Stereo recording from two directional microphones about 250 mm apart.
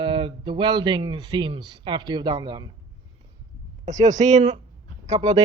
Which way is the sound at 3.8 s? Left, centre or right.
Right.